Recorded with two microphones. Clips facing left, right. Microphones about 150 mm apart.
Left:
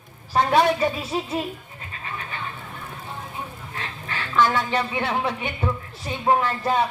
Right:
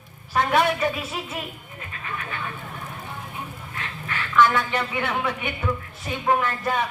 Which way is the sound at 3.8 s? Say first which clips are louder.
Even; 30° left (ahead or behind).